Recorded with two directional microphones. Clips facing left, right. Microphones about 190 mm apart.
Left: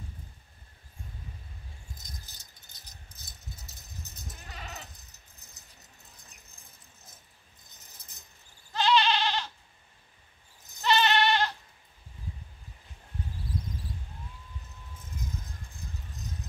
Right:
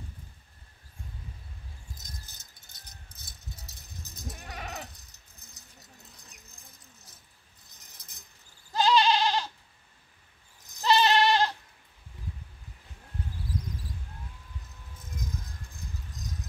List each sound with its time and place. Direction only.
4.5 s goat: 65° right (ahead or behind)
8.7 s goat: 40° right (ahead or behind)
10.8 s goat: 35° right (ahead or behind)